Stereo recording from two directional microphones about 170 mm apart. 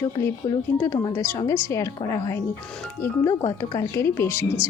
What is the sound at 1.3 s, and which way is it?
Speech, 15° left (ahead or behind).